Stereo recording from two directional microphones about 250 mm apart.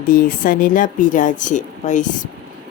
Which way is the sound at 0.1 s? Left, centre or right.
Left.